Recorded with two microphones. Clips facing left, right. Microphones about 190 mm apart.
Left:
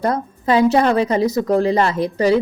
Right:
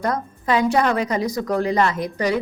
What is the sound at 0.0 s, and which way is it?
A woman's voice, 30° left (ahead or behind).